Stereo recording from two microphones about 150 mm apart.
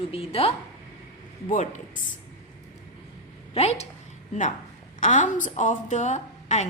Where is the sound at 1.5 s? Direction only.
55° left (ahead or behind).